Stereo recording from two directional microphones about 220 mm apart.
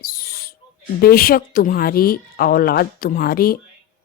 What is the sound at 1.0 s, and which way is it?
Speech, 40° left (ahead or behind).